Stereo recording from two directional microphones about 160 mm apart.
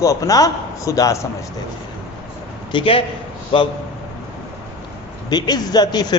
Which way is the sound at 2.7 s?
35° left (ahead or behind).